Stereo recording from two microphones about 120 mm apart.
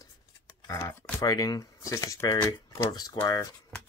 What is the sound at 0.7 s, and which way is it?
Speech, 25° left (ahead or behind).